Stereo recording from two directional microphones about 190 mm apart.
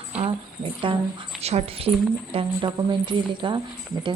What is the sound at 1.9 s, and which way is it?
Speech, 5° right (ahead or behind).